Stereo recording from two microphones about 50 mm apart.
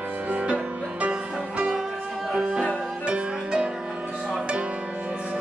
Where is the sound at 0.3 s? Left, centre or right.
Right.